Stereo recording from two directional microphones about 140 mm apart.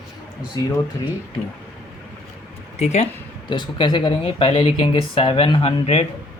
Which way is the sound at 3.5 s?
35° left (ahead or behind).